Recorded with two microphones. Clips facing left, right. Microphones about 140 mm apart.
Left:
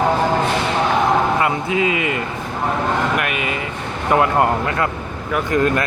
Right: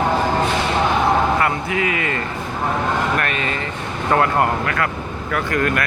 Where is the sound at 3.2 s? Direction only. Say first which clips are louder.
Left 1 dB; 10° left (ahead or behind).